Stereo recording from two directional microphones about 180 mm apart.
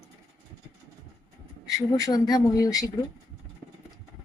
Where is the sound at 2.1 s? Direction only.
20° left (ahead or behind).